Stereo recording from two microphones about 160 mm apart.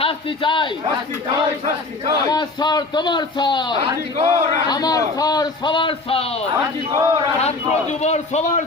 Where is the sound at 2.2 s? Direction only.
25° left (ahead or behind).